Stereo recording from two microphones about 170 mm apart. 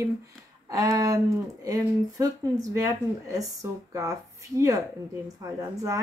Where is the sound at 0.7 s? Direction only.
20° right (ahead or behind).